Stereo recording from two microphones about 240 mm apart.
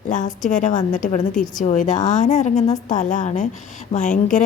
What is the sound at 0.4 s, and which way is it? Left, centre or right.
A woman's voice, left.